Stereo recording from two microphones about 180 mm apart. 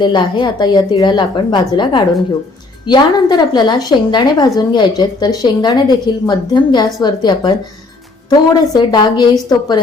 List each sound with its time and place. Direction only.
0.0 s a woman's voice: 25° left (ahead or behind)